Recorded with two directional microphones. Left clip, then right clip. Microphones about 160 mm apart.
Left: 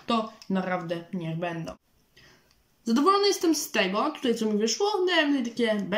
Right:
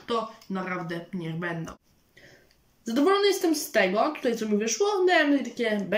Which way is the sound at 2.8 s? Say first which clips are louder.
Even; 35° left (ahead or behind).